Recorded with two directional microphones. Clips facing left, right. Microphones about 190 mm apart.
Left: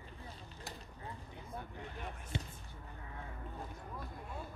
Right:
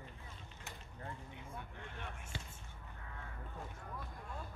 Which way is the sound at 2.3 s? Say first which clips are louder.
Left 10 dB; 20° left (ahead or behind).